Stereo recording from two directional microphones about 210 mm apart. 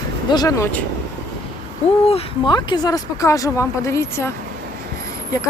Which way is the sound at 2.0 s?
25° left (ahead or behind).